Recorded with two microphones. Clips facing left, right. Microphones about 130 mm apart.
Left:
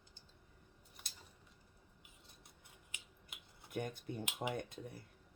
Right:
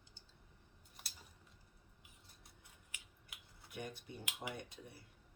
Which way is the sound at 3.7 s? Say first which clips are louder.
Left 6 dB; 50° left (ahead or behind).